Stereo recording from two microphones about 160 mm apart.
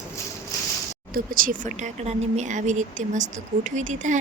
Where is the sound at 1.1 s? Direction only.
65° right (ahead or behind).